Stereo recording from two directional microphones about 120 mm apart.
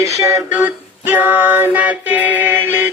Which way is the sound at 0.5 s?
15° right (ahead or behind).